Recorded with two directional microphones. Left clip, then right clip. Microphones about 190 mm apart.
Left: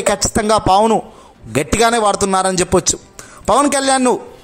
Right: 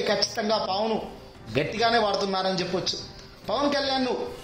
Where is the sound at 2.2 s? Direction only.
50° left (ahead or behind).